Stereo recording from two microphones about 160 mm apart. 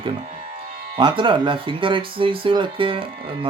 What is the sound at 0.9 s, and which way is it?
Speech, 30° right (ahead or behind).